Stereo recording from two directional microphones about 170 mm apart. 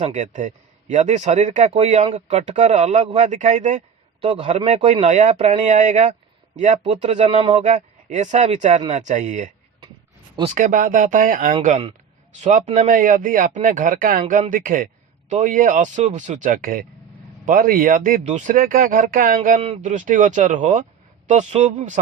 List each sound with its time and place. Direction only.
0.1 s a man's voice: 45° right (ahead or behind)
18.2 s a man's voice: 40° right (ahead or behind)
19.5 s a man's voice: 35° right (ahead or behind)